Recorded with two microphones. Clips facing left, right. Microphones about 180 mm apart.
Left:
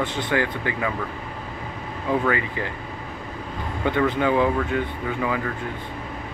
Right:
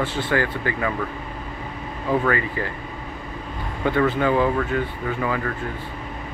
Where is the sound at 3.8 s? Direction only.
15° left (ahead or behind).